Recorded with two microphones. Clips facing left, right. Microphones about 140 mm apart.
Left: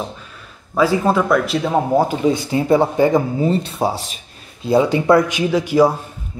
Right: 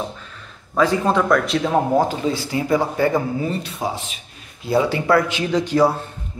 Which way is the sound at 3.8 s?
35° left (ahead or behind).